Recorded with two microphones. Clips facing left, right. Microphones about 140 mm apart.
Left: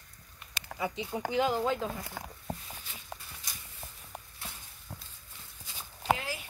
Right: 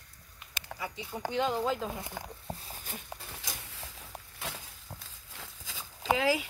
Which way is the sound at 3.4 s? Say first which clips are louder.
Right 4 dB; 90° right.